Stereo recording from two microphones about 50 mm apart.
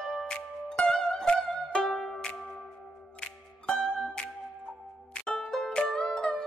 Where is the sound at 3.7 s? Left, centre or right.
Centre.